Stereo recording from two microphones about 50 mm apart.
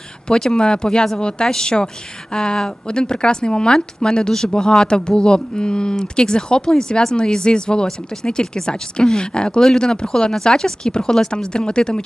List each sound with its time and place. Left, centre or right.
0.3 s speech: centre